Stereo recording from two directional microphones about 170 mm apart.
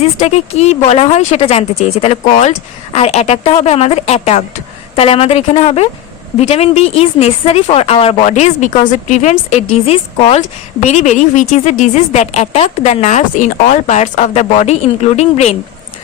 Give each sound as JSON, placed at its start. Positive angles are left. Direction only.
{"t": 0.0, "sound": "a woman's voice", "side_deg": 40}